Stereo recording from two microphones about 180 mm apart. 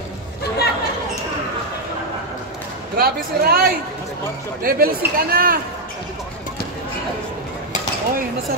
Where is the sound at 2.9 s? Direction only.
60° right (ahead or behind).